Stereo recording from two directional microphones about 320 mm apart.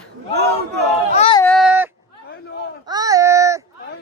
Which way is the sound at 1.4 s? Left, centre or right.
Centre.